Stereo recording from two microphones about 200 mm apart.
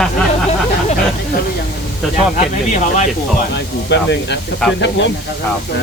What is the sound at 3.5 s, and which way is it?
Speech, 60° left (ahead or behind).